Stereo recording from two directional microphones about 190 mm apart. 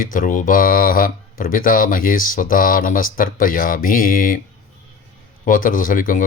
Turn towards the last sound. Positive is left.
turn(degrees=45)  # may be behind; listen again after turning